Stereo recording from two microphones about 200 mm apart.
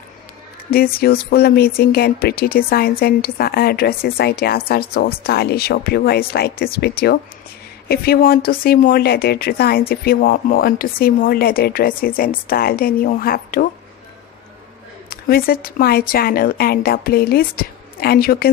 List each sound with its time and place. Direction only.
0.7 s a woman's voice: 50° left (ahead or behind)
15.0 s a woman's voice: 50° left (ahead or behind)